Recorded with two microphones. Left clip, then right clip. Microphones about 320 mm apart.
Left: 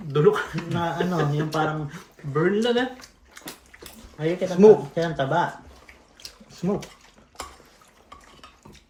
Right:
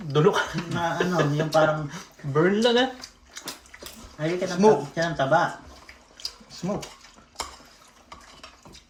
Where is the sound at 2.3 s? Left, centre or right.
Centre.